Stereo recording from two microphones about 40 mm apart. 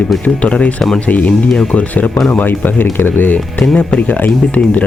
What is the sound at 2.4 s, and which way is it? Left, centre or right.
Speech, left.